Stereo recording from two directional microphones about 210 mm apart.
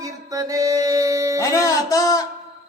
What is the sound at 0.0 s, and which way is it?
Music, 15° right (ahead or behind).